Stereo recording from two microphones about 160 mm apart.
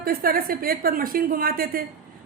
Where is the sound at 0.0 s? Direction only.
65° right (ahead or behind).